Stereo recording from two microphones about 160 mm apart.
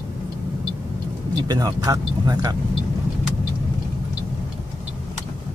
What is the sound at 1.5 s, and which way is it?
Speech, 25° right (ahead or behind).